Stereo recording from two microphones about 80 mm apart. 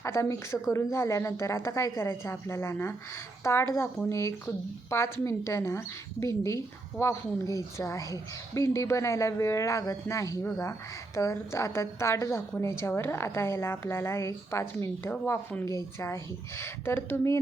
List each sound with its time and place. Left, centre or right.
0.0 s a woman's voice: left